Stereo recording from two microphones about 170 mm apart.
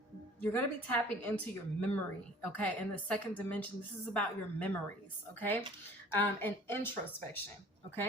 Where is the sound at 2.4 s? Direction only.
10° left (ahead or behind).